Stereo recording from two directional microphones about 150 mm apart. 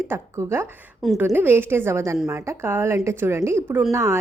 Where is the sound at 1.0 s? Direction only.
Centre (ahead or behind).